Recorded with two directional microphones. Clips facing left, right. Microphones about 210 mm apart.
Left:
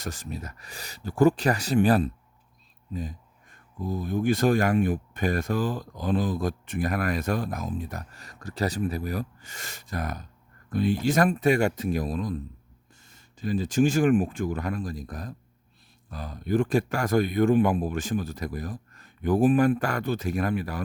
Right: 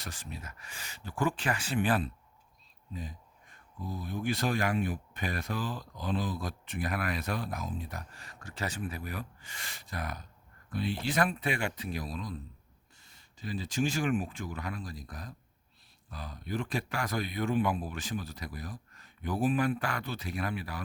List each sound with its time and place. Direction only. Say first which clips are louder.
0.0 s speech: left 8 dB; 40° left (ahead or behind)